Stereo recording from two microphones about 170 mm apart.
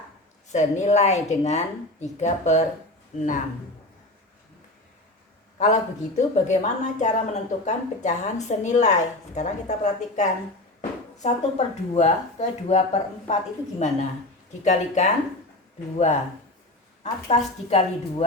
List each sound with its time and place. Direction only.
0.4 s a woman's voice: 45° left (ahead or behind)
5.5 s a woman's voice: 45° left (ahead or behind)
17.0 s speech: 40° left (ahead or behind)